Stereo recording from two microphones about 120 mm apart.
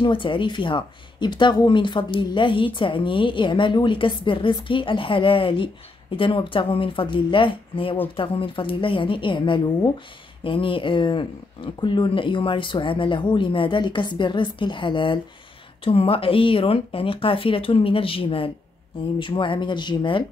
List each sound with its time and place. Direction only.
0.0 s speech: 45° left (ahead or behind)